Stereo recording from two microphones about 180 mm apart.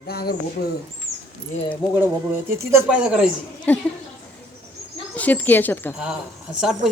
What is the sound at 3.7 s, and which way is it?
Speech, 10° left (ahead or behind).